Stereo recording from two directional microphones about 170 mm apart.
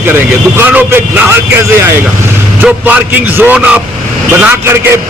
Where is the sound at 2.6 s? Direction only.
10° right (ahead or behind).